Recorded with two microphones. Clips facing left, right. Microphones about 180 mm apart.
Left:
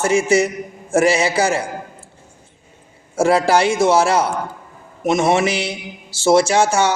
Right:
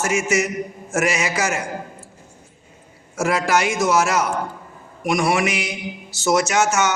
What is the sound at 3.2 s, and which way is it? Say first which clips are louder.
A man's voice: left 5 dB; 30° left (ahead or behind).